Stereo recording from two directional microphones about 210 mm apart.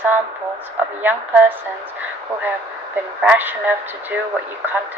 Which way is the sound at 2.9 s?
10° right (ahead or behind).